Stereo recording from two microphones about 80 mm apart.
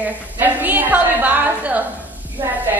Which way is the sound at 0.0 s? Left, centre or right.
Right.